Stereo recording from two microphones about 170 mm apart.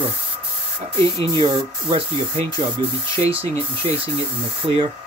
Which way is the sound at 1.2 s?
30° right (ahead or behind).